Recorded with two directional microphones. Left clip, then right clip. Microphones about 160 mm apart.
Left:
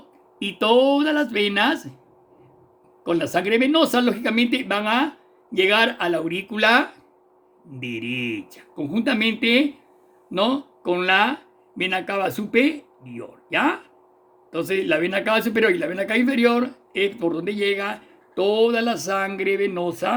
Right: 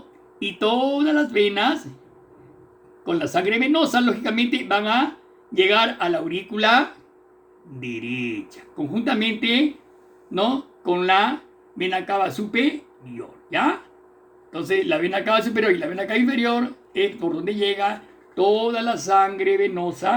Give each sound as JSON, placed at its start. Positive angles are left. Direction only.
{"t": 0.3, "sound": "a man's voice", "side_deg": 90}
{"t": 3.0, "sound": "a man's voice", "side_deg": 90}
{"t": 7.9, "sound": "a man's voice", "side_deg": 90}